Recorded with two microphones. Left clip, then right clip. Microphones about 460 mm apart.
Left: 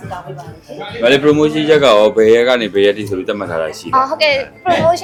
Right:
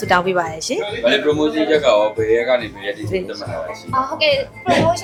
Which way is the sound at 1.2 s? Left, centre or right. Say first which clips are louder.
Left 5 dB; left.